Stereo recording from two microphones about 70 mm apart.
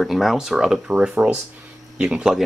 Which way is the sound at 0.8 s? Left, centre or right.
Centre.